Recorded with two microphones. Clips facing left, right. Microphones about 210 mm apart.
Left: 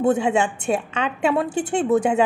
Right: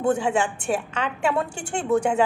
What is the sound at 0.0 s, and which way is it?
A woman's voice, 20° left (ahead or behind).